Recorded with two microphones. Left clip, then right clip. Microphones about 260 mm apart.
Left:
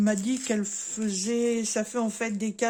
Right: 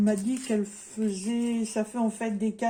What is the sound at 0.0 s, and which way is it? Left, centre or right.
Speech, left.